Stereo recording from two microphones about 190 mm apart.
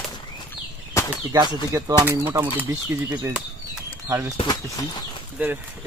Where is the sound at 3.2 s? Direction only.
10° right (ahead or behind).